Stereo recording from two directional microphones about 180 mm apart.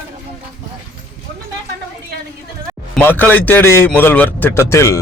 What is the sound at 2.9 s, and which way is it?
A man's voice, 10° left (ahead or behind).